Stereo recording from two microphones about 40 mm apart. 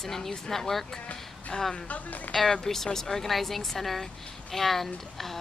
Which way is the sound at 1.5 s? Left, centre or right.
Centre.